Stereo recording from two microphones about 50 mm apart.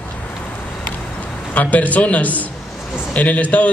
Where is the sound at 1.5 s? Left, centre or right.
Left.